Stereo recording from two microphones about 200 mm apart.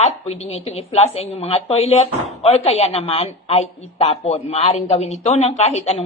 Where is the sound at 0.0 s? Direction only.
30° left (ahead or behind).